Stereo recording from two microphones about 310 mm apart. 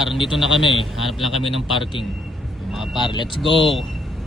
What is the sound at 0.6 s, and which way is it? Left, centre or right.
Speech, centre.